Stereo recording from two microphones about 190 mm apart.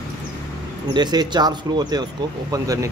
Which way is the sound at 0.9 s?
20° right (ahead or behind).